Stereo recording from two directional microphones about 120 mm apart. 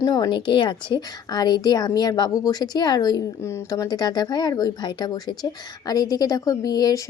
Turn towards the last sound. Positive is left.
turn(degrees=35)  # may be behind; listen again after turning